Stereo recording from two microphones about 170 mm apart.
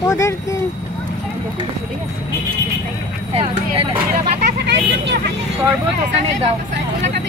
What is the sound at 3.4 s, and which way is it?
Vehicle, 30° right (ahead or behind).